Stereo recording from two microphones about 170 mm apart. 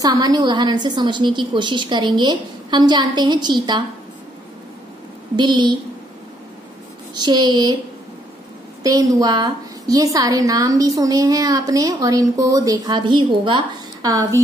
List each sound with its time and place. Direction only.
0.0 s a woman's voice: 20° right (ahead or behind)
5.3 s a woman's voice: 25° right (ahead or behind)
7.2 s a woman's voice: 25° right (ahead or behind)
8.8 s a woman's voice: 20° right (ahead or behind)